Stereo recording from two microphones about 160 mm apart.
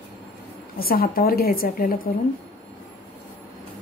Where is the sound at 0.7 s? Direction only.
70° left (ahead or behind).